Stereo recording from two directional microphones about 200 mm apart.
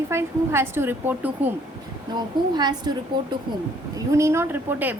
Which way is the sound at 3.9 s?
15° right (ahead or behind).